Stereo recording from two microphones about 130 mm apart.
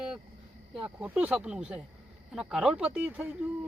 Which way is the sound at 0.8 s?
10° right (ahead or behind).